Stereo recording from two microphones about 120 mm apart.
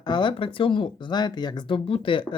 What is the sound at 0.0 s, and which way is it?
Speech, 40° left (ahead or behind).